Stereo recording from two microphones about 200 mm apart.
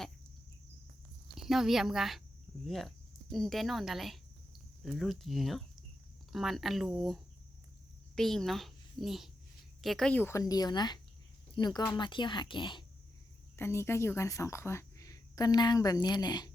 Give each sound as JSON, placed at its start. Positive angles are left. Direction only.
{"t": 1.4, "sound": "a woman's voice", "side_deg": 0}
{"t": 13.6, "sound": "a woman's voice", "side_deg": 10}